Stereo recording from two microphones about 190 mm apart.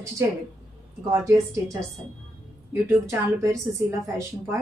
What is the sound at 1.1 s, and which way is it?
Speech, 15° right (ahead or behind).